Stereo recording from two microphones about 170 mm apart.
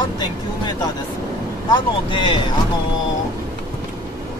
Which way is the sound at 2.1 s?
30° left (ahead or behind).